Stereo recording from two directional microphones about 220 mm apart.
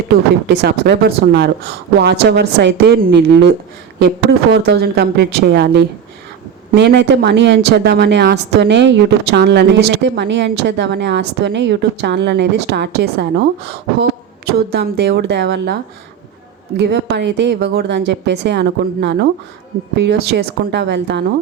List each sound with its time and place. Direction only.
0.4 s speech: 50° right (ahead or behind)
16.7 s speech: 50° right (ahead or behind)